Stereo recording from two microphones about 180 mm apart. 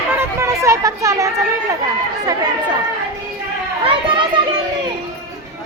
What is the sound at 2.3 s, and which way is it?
Speech, 20° right (ahead or behind).